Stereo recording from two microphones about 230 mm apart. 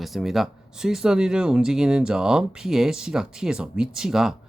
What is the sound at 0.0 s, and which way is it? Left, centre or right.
Speech, centre.